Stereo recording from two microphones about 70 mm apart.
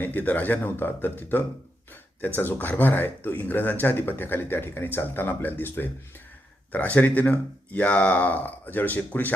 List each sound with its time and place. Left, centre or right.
0.0 s speech: left